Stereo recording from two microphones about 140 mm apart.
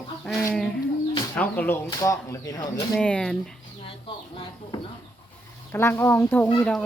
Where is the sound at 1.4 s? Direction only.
15° left (ahead or behind).